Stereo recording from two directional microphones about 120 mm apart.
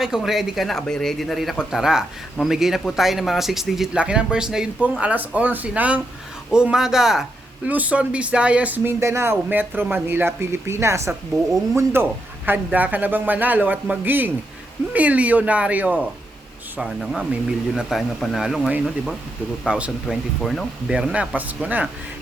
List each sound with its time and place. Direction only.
0.0 s speech: 5° right (ahead or behind)